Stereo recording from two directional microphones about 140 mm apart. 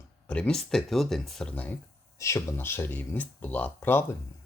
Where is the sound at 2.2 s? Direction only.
20° left (ahead or behind).